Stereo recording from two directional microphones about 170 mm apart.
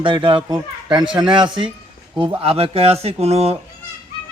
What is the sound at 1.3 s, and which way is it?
Speech, 30° right (ahead or behind).